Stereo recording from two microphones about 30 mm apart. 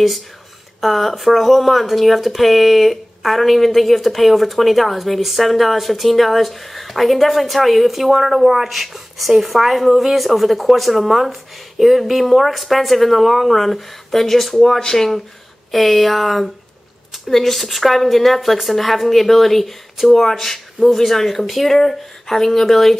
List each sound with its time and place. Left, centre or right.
0.7 s a woman's voice: centre
14.8 s speech: left
15.7 s a woman's voice: centre